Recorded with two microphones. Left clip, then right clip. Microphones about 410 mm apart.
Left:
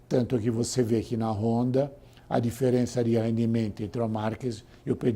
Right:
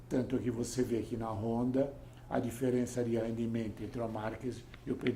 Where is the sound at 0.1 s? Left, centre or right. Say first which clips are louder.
Left 8 dB; left.